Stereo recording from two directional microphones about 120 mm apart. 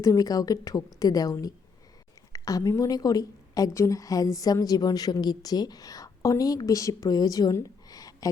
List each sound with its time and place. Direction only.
0.0 s a woman's voice: 30° left (ahead or behind)